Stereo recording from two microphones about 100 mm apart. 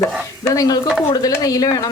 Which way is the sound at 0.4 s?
35° left (ahead or behind).